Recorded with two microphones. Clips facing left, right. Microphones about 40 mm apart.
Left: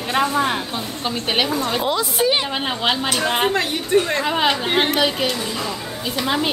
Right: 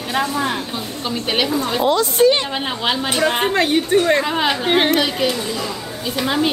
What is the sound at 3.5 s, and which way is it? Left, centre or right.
Speech, right.